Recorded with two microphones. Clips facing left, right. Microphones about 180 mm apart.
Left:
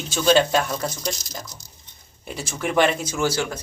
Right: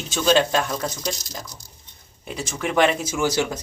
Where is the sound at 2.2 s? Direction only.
Centre (ahead or behind).